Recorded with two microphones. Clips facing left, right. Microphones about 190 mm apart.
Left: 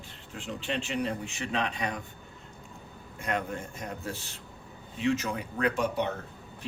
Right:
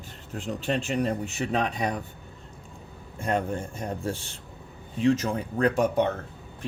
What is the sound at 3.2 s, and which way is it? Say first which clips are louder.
Speech: right 5 dB; 30° right (ahead or behind).